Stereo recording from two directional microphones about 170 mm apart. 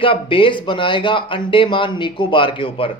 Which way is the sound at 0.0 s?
30° left (ahead or behind).